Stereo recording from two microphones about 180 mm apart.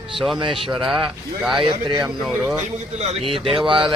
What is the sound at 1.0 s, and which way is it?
A man's voice, centre (ahead or behind).